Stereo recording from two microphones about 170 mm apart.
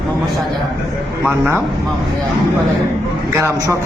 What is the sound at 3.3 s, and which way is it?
Speech, 15° right (ahead or behind).